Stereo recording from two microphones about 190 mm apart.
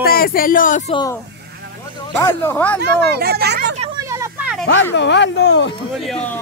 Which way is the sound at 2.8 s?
55° right (ahead or behind).